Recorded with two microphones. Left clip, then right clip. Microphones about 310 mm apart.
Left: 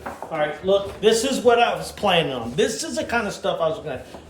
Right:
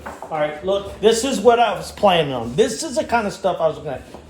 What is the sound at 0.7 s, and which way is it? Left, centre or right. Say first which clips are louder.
A man's voice: right 1 dB; centre.